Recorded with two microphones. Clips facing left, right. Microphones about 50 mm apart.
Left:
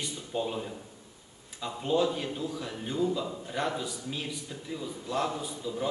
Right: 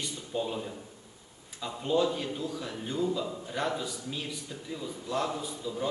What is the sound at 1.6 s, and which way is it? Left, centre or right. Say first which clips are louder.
A man's voice: even; centre.